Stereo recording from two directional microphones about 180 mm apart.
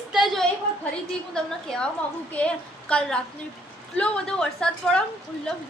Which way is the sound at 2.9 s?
5° left (ahead or behind).